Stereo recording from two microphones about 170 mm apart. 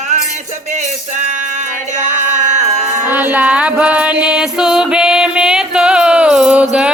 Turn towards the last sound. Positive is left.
turn(degrees=-5)  # may be behind; listen again after turning